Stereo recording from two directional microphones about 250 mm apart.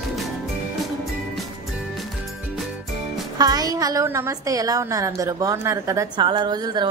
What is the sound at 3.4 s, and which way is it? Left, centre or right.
A woman's voice, centre.